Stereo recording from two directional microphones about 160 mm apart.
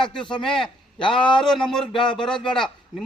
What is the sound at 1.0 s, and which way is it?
Speech, 30° left (ahead or behind).